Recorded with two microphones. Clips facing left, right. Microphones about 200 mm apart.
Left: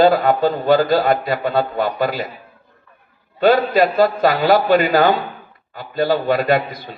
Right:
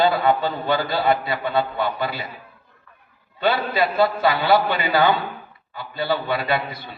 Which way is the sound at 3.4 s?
45° left (ahead or behind).